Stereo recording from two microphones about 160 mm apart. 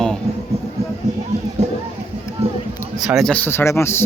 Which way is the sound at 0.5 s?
40° right (ahead or behind).